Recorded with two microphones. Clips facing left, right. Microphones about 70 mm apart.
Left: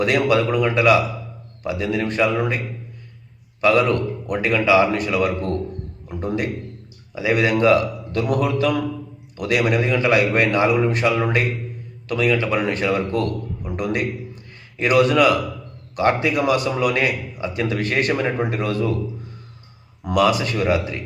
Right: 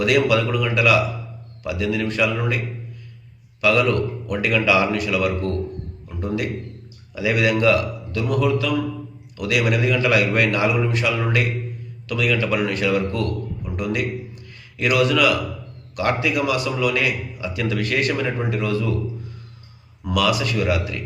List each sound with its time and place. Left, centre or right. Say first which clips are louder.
0.0 s a man's voice: even; left
3.6 s a man's voice: left 1 dB; left
8.1 s a man's voice: even; left
20.1 s a man's voice: left 3 dB; left